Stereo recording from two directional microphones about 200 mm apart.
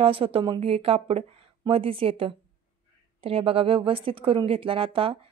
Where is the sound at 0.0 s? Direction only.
25° right (ahead or behind).